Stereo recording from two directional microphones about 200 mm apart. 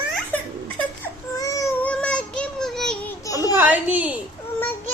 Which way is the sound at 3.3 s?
15° left (ahead or behind).